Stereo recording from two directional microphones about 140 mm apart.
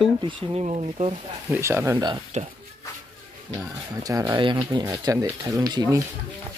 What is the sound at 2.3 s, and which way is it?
Speech, 55° right (ahead or behind).